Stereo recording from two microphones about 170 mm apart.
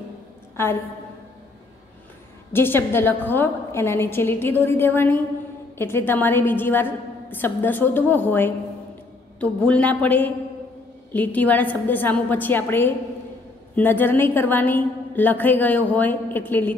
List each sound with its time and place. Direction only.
0.6 s a woman's voice: 15° left (ahead or behind)
2.5 s a woman's voice: 15° left (ahead or behind)